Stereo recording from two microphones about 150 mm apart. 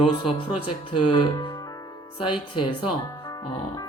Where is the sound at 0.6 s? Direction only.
35° left (ahead or behind).